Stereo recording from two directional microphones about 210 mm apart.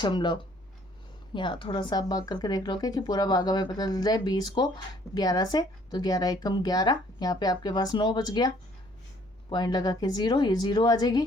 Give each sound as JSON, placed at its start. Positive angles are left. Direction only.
{"t": 0.0, "sound": "speech", "side_deg": 20}